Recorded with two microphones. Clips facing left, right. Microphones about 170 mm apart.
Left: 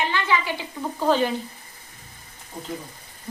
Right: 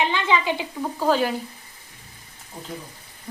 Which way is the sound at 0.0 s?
20° right (ahead or behind).